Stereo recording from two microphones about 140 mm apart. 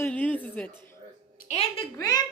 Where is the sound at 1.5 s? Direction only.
50° left (ahead or behind).